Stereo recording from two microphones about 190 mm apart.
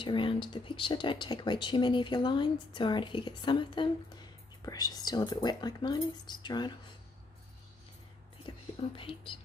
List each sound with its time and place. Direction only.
0.0 s speech: 25° left (ahead or behind)
8.5 s speech: 25° left (ahead or behind)